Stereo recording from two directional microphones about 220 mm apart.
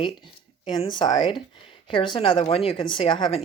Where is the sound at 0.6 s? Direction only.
20° left (ahead or behind).